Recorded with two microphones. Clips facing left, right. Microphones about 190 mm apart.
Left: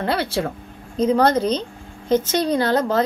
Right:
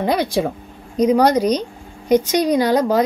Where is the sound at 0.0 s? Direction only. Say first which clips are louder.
Right 4 dB; 15° right (ahead or behind).